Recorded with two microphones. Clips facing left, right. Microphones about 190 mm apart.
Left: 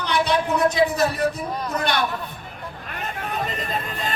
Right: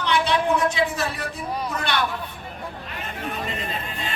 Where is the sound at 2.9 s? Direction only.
45° left (ahead or behind).